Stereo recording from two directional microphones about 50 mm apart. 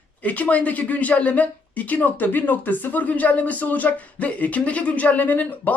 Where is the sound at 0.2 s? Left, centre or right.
Left.